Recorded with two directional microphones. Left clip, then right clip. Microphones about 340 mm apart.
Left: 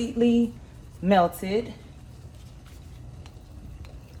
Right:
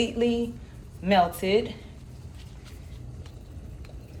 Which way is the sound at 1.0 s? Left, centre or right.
Centre.